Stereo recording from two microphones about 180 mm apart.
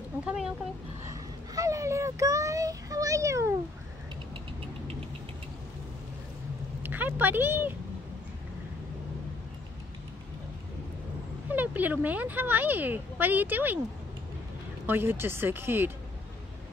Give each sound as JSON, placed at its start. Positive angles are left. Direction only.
{"t": 0.2, "sound": "speech", "side_deg": -5}
{"t": 1.5, "sound": "speech", "side_deg": -20}
{"t": 6.8, "sound": "speech", "side_deg": -10}
{"t": 11.5, "sound": "speech", "side_deg": -10}
{"t": 14.9, "sound": "speech", "side_deg": -10}